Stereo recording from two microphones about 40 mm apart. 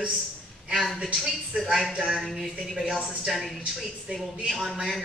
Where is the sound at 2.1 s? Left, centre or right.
Centre.